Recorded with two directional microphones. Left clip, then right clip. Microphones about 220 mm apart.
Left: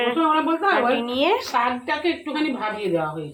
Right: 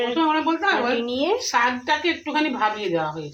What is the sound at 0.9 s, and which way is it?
Speech, centre (ahead or behind).